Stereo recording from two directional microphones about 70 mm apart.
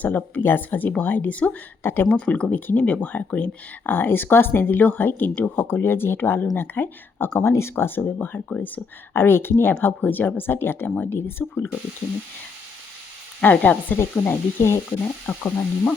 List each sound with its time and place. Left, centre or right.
0.0 s speech: left
1.8 s speech: left
2.0 s speech: centre
13.4 s speech: centre
14.0 s speech: left